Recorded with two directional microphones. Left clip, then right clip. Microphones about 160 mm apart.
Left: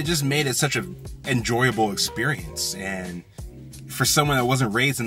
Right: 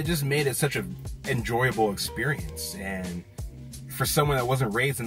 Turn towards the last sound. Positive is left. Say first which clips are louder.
# left 4 dB
turn(degrees=25)  # may be behind; listen again after turning